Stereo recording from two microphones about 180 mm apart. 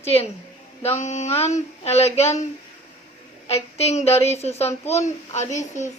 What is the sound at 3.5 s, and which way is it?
A woman's voice, 35° left (ahead or behind).